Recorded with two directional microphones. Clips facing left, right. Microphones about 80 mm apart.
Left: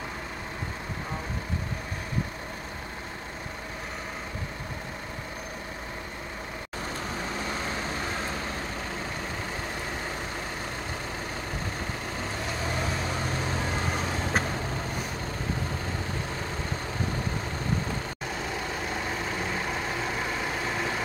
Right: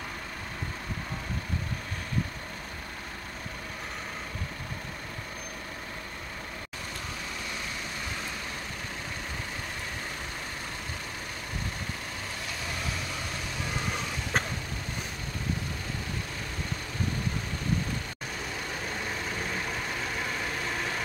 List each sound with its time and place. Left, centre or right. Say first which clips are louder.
7.4 s vehicle: left 6 dB; left
12.6 s vehicle: left 5 dB; left